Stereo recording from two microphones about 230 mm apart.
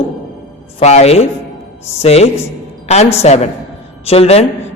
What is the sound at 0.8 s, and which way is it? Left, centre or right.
A man's voice, left.